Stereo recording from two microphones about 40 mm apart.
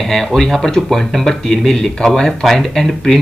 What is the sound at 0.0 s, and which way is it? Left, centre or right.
Speech, centre.